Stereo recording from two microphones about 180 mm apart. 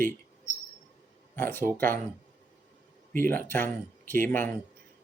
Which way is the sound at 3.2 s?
10° left (ahead or behind).